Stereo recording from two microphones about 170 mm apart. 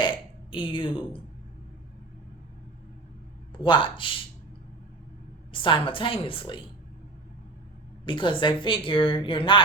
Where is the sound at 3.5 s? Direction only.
25° left (ahead or behind).